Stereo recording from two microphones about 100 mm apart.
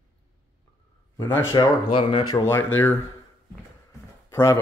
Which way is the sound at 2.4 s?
25° left (ahead or behind).